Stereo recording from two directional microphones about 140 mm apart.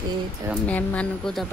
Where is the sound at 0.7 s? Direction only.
10° left (ahead or behind).